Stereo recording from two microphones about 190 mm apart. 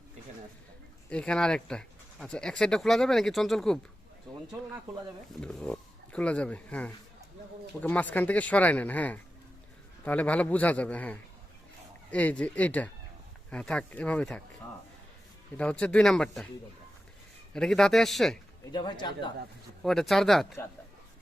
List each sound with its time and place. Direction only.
1.1 s speech: 5° left (ahead or behind)
15.5 s speech: 5° left (ahead or behind)
17.5 s speech: 5° left (ahead or behind)
18.7 s speech: 25° left (ahead or behind)
19.8 s speech: centre (ahead or behind)